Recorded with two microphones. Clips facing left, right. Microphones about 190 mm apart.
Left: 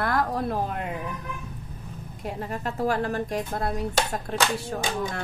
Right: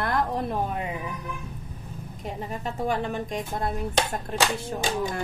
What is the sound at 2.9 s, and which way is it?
Speech, 20° right (ahead or behind).